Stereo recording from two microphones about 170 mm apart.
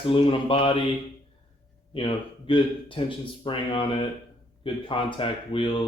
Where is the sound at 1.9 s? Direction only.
30° left (ahead or behind).